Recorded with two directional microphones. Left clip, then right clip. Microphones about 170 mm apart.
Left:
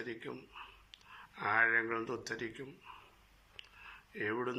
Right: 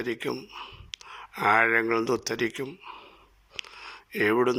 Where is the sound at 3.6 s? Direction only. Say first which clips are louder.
Right 13 dB; 45° right (ahead or behind).